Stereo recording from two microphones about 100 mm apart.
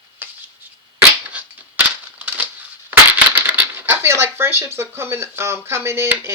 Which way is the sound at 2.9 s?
15° right (ahead or behind).